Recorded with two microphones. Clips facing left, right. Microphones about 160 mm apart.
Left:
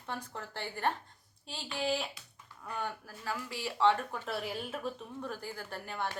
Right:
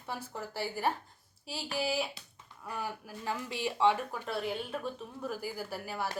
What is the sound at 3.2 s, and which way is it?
A woman's voice, 20° right (ahead or behind).